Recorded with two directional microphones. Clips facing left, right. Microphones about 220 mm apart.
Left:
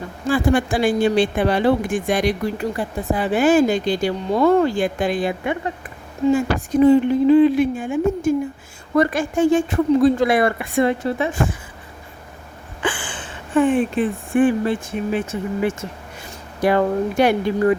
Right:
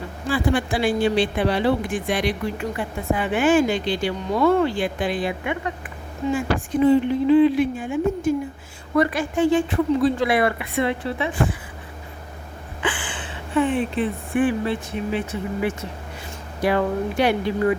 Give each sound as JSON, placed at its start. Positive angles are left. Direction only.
{"t": 0.3, "sound": "speech", "side_deg": 45}
{"t": 12.8, "sound": "speech", "side_deg": 45}